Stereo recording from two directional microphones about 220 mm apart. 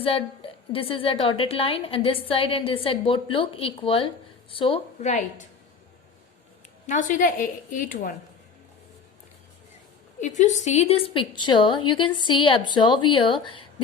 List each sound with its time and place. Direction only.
0.0 s a woman's voice: 25° left (ahead or behind)
6.8 s a woman's voice: 35° left (ahead or behind)
10.2 s a woman's voice: 35° left (ahead or behind)